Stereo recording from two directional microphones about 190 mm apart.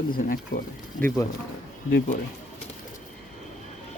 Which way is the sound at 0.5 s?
45° left (ahead or behind).